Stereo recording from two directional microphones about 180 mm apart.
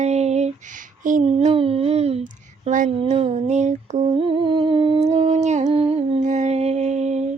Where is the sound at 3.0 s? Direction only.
35° right (ahead or behind).